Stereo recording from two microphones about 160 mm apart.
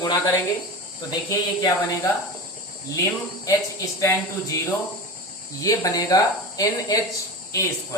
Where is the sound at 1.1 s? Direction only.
20° left (ahead or behind).